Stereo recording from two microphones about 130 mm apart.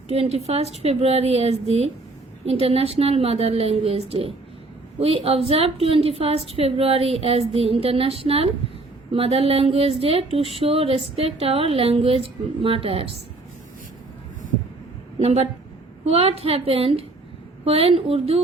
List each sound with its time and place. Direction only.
0.1 s speech: 55° right (ahead or behind)
15.2 s speech: 50° right (ahead or behind)